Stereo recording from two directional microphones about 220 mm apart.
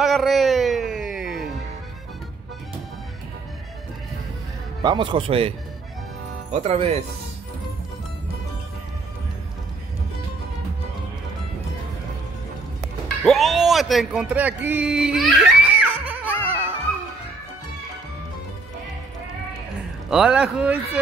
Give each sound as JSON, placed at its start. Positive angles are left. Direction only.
{"t": 0.0, "sound": "carnatic music", "side_deg": 0}
{"t": 4.8, "sound": "a man's voice", "side_deg": -20}
{"t": 6.5, "sound": "a man's voice", "side_deg": -30}
{"t": 13.2, "sound": "a sound", "side_deg": 0}
{"t": 16.4, "sound": "music", "side_deg": -10}
{"t": 20.1, "sound": "speech", "side_deg": -5}